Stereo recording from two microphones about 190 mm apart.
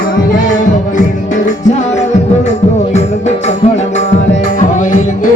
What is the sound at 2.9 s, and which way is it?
Music, 35° left (ahead or behind).